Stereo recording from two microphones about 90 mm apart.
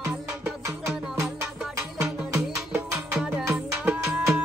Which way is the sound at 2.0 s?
25° right (ahead or behind).